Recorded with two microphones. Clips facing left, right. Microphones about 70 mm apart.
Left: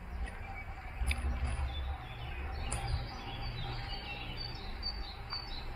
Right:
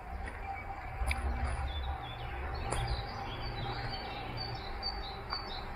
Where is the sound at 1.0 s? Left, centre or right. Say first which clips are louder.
Right 2 dB; right.